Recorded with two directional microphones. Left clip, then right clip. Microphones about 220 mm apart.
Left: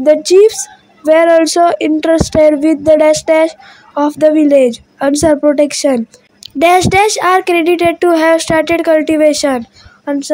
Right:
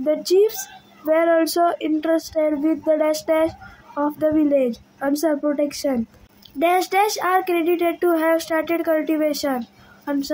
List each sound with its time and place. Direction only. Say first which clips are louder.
0.0 s a woman's voice: left 11 dB; 35° left (ahead or behind)